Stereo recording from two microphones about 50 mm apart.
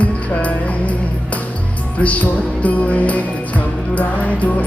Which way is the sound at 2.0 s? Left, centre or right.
Left.